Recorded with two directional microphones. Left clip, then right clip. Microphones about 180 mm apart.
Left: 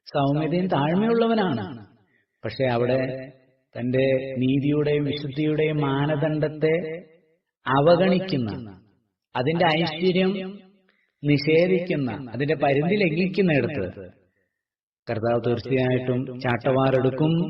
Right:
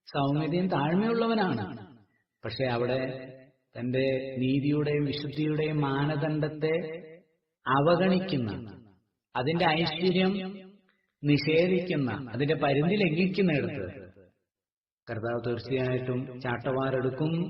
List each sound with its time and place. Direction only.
0.0 s a man's voice: 25° left (ahead or behind)
13.6 s a man's voice: 40° left (ahead or behind)
15.0 s a man's voice: 35° left (ahead or behind)